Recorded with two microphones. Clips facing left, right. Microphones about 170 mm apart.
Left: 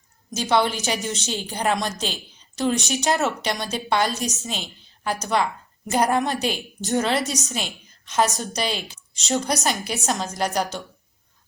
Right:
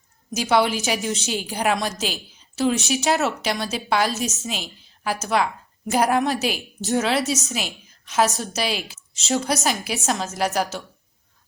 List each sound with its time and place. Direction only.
0.3 s a woman's voice: 5° right (ahead or behind)